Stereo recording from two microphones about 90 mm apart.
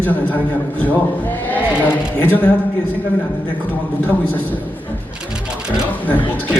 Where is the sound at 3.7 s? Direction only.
20° left (ahead or behind).